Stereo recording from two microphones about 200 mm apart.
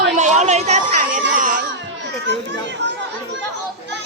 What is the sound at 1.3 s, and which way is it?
Music, 40° right (ahead or behind).